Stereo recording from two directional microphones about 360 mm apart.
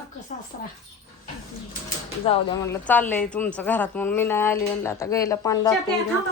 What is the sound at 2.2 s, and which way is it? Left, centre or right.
Speech, centre.